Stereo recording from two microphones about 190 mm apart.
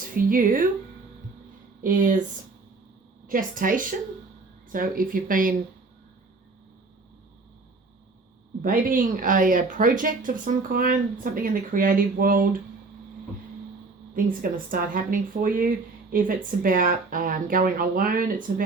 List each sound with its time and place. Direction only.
0.0 s speech: 45° right (ahead or behind)
1.8 s speech: 45° right (ahead or behind)
3.2 s speech: 45° right (ahead or behind)
8.6 s speech: 45° right (ahead or behind)
14.1 s speech: 45° right (ahead or behind)